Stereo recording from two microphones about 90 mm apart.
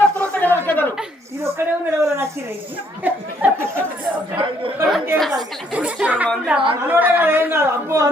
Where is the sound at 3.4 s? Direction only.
15° right (ahead or behind).